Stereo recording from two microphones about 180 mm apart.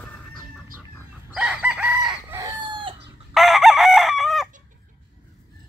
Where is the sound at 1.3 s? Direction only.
5° right (ahead or behind); by 2.9 s 25° right (ahead or behind).